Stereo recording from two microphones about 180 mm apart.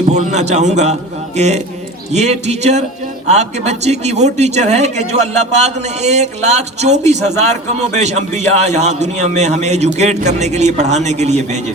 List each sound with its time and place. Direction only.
0.1 s a man's voice: 40° right (ahead or behind)